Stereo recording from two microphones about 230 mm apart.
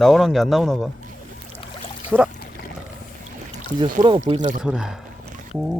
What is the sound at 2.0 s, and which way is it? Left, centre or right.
Boat, centre.